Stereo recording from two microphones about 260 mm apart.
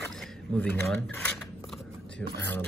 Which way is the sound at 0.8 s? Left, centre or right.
Centre.